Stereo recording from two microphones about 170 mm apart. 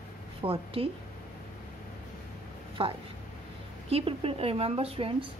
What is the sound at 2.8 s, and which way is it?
A woman's voice, 35° right (ahead or behind).